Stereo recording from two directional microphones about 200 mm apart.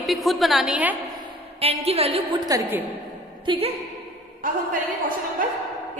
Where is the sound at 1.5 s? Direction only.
30° right (ahead or behind).